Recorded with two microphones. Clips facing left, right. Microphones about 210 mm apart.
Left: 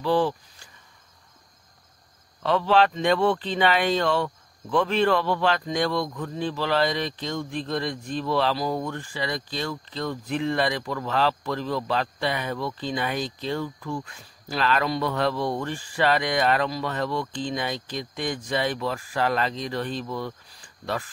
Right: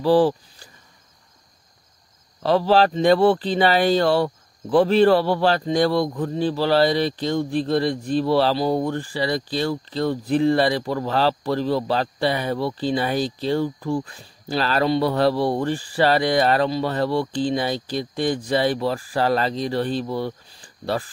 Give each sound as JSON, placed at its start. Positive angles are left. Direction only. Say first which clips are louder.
{"t": 0.0, "sound": "speech", "louder": "right 6 dB", "side_deg": -35}
{"t": 2.4, "sound": "speech", "louder": "right 4 dB", "side_deg": -35}